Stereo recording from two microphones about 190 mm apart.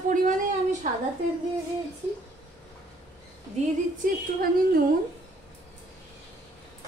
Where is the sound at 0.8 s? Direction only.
40° right (ahead or behind).